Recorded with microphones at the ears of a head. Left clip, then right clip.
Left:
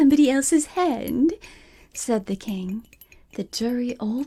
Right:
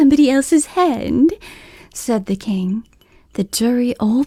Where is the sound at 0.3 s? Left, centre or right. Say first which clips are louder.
Right 6 dB; right.